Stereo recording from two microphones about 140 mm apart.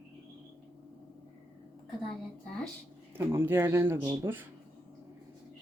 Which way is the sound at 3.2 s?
15° right (ahead or behind).